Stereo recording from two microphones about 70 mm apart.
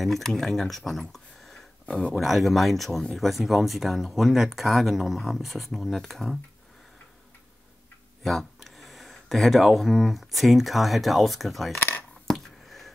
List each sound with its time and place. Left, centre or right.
0.0 s speech: centre
8.2 s speech: centre
11.7 s coin: left
12.3 s a sound: centre